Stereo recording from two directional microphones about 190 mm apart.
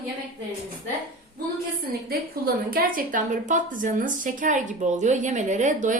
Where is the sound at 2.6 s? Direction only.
50° right (ahead or behind).